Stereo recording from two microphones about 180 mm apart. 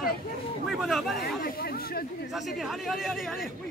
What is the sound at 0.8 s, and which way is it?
Speech, centre (ahead or behind).